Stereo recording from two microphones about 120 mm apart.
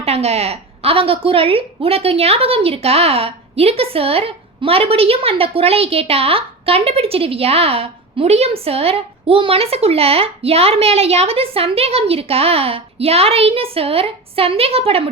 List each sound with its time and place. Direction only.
0.0 s a woman's voice: 60° right (ahead or behind)